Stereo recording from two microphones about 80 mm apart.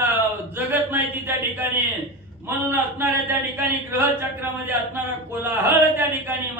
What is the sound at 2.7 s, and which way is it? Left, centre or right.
A man's voice, right.